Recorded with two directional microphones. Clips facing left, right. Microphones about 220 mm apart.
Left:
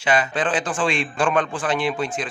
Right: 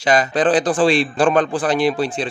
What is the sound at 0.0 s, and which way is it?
A man's voice, 40° right (ahead or behind).